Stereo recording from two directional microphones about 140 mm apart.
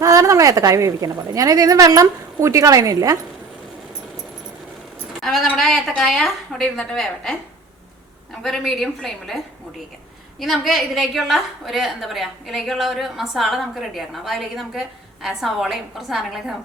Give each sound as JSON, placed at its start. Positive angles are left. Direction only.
{"t": 0.0, "sound": "a woman's voice", "side_deg": -25}
{"t": 5.2, "sound": "a woman's voice", "side_deg": 0}
{"t": 10.4, "sound": "a woman's voice", "side_deg": 0}